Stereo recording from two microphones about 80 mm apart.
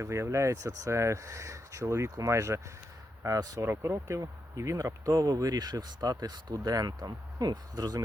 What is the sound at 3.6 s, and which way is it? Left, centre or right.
Speech, right.